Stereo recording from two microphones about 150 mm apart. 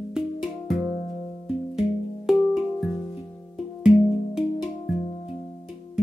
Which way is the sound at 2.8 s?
25° left (ahead or behind).